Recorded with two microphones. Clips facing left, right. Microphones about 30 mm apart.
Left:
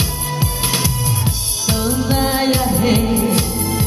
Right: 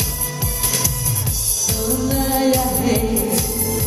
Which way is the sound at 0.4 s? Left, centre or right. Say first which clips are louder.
Left 4 dB; left.